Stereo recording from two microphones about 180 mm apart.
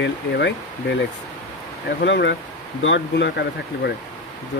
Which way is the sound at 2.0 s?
85° left.